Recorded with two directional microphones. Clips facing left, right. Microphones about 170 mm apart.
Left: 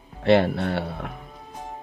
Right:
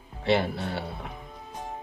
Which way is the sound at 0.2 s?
60° left (ahead or behind).